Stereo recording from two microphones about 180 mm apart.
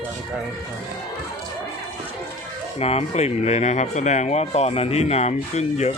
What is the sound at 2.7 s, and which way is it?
Speech, 35° left (ahead or behind).